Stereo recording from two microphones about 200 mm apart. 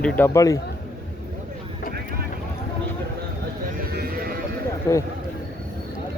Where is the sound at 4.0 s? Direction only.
50° right (ahead or behind).